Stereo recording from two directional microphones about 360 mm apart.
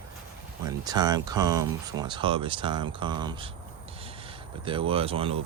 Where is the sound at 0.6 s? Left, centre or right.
Centre.